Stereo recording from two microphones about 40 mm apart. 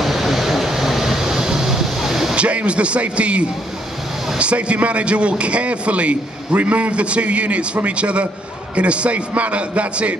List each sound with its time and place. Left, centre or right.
0.0 s vehicle: centre
2.3 s a man's voice: right